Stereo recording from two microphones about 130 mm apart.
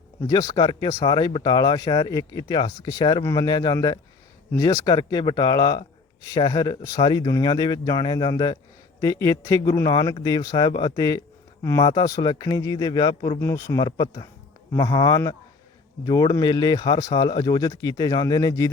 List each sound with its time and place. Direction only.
0.2 s speech: 25° left (ahead or behind)
13.4 s speech: 20° left (ahead or behind)